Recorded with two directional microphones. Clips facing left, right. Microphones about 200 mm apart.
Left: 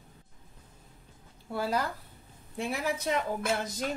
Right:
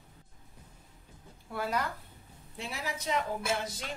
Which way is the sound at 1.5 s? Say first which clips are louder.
Left 3 dB; 30° left (ahead or behind).